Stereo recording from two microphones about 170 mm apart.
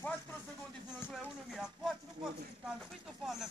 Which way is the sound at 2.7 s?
Centre (ahead or behind).